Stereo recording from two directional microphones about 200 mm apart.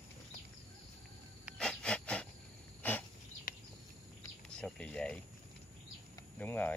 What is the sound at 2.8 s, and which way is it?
Dog, 10° left (ahead or behind).